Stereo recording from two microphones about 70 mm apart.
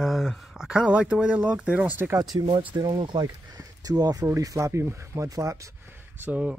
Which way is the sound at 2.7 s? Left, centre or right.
Right.